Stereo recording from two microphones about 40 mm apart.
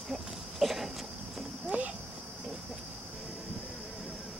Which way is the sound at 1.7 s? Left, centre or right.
Right.